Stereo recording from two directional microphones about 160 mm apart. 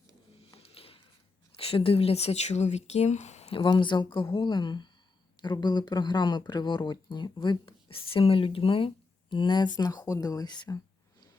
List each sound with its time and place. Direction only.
0.5 s a sound: 35° left (ahead or behind)
1.5 s speech: 35° left (ahead or behind)
3.6 s speech: 30° left (ahead or behind)